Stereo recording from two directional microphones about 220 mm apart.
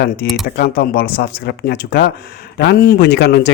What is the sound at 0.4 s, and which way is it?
A man's voice, 45° left (ahead or behind).